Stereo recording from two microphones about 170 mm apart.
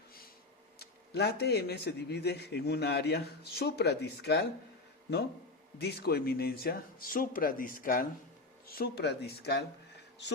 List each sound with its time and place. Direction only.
0.8 s speech: 70° left (ahead or behind)
5.8 s speech: 70° left (ahead or behind)